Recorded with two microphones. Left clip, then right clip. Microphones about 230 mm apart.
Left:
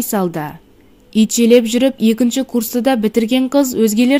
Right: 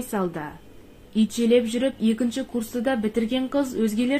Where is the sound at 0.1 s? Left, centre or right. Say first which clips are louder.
Left 8 dB; left.